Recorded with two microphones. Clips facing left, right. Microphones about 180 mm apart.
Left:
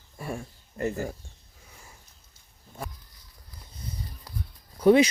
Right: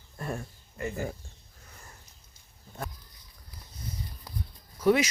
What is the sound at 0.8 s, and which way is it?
Speech, 40° left (ahead or behind).